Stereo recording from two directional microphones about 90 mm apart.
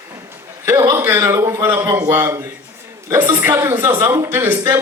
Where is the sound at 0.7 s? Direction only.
30° right (ahead or behind).